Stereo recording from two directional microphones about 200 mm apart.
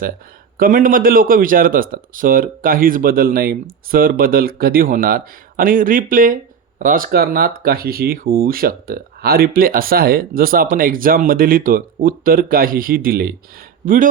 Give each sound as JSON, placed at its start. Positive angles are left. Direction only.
{"t": 0.5, "sound": "a man's voice", "side_deg": -45}